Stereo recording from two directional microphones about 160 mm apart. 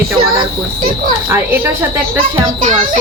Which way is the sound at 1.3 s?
15° right (ahead or behind).